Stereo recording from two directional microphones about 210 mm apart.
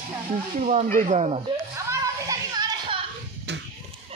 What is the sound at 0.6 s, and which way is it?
Speech, 30° right (ahead or behind).